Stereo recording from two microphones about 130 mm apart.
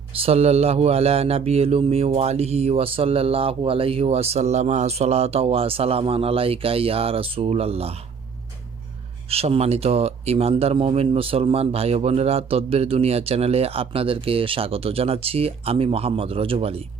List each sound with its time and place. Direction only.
0.2 s a man's voice: 50° right (ahead or behind)
9.3 s a man's voice: 50° right (ahead or behind)